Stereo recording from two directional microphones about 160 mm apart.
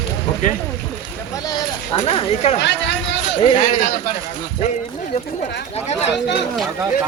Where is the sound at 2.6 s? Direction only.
90° left.